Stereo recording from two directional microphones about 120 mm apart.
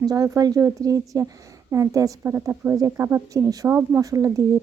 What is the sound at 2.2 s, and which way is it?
Speech, 15° right (ahead or behind).